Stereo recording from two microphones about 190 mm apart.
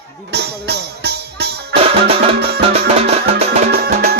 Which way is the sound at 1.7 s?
30° right (ahead or behind).